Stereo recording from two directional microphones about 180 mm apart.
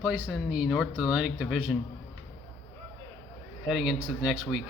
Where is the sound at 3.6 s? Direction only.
5° right (ahead or behind).